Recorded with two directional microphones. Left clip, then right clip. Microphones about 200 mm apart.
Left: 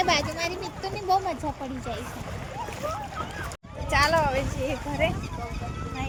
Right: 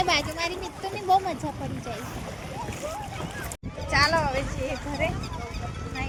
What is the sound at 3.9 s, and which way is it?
Speech, 10° left (ahead or behind).